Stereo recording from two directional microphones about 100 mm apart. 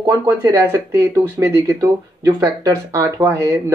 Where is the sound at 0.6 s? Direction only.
25° right (ahead or behind).